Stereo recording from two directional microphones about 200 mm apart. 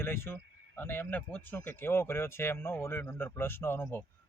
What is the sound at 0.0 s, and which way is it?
Speech, 10° left (ahead or behind).